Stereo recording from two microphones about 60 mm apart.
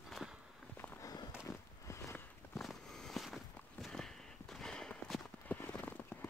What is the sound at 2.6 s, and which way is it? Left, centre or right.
Walk, centre.